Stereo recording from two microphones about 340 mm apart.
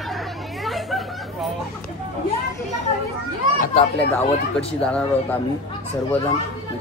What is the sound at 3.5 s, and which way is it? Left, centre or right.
Chatter, left.